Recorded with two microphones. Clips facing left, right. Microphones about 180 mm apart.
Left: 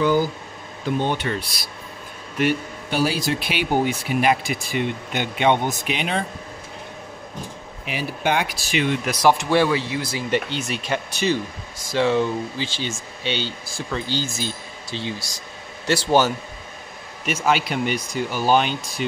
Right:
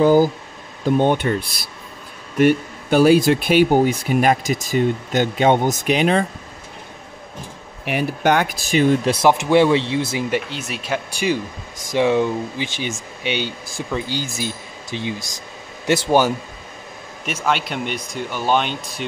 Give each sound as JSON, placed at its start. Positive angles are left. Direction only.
{"t": 0.0, "sound": "speech", "side_deg": -40}
{"t": 0.8, "sound": "speech", "side_deg": -50}
{"t": 7.8, "sound": "speech", "side_deg": -60}
{"t": 9.1, "sound": "speech", "side_deg": -20}
{"t": 10.3, "sound": "speech", "side_deg": -5}
{"t": 17.5, "sound": "speech", "side_deg": 5}